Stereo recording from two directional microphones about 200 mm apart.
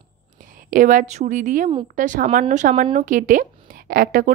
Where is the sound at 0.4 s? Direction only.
40° right (ahead or behind).